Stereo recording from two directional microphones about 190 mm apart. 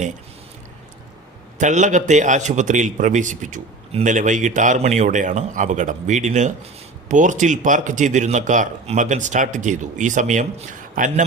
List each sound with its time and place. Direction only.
1.5 s a man's voice: 40° right (ahead or behind)